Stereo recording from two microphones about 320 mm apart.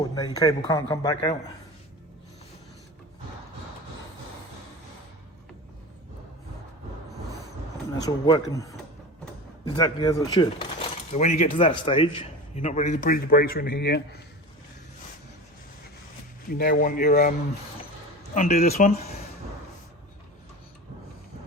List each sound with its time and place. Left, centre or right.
0.1 s a man's voice: centre
8.0 s a man's voice: centre
9.7 s a man's voice: centre; by 14.2 s left
16.5 s speech: left
18.3 s speech: centre